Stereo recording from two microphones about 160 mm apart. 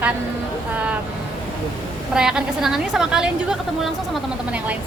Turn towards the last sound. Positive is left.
turn(degrees=-5)  # may be behind; listen again after turning